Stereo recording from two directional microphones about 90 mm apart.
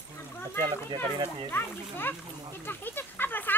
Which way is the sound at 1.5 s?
25° left (ahead or behind).